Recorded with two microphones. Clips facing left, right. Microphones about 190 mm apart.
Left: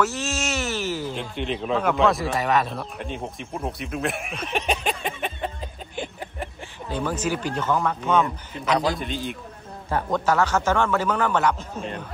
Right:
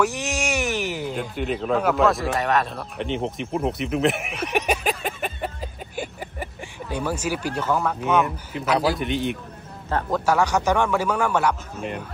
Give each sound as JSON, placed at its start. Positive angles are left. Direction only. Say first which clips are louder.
{"t": 0.0, "sound": "wail", "louder": "right 1 dB", "side_deg": -15}
{"t": 1.1, "sound": "speech", "louder": "right 2 dB", "side_deg": -5}
{"t": 3.2, "sound": "speech", "louder": "right 6 dB", "side_deg": -20}
{"t": 4.4, "sound": "a sound", "louder": "right 3 dB", "side_deg": -10}
{"t": 5.9, "sound": "speech", "louder": "right 1 dB", "side_deg": -10}
{"t": 9.0, "sound": "a man's voice", "louder": "right 5 dB", "side_deg": -65}
{"t": 10.1, "sound": "a man's voice", "louder": "right 1 dB", "side_deg": -10}